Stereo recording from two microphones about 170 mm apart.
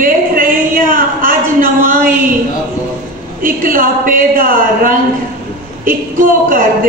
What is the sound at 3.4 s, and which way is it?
A man's voice, 55° right (ahead or behind).